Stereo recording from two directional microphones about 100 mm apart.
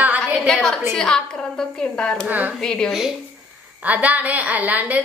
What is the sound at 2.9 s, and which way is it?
Speech, 5° right (ahead or behind).